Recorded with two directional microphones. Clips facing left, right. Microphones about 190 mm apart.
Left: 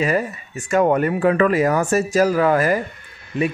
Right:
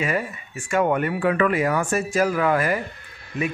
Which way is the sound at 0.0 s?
35° left (ahead or behind).